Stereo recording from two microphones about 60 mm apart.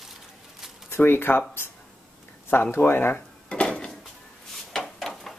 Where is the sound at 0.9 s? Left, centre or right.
Left.